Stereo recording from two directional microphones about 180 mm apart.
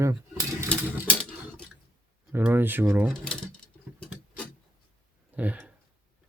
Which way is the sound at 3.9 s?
5° left (ahead or behind).